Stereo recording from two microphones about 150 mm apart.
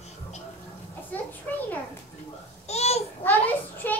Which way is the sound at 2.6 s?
45° left (ahead or behind).